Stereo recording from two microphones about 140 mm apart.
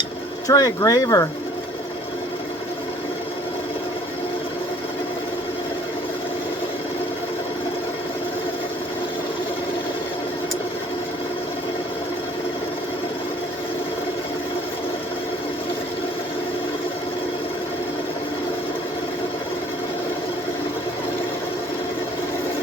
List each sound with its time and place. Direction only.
0.4 s speech: 25° left (ahead or behind)